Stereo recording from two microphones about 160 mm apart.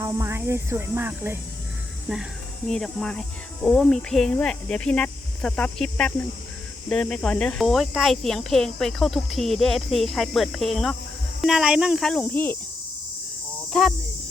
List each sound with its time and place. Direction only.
0.0 s speech: 15° right (ahead or behind); by 12.5 s 10° left (ahead or behind)
13.7 s speech: 5° left (ahead or behind)